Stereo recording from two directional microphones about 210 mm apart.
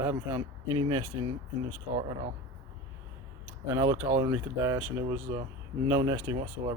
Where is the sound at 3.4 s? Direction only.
15° right (ahead or behind).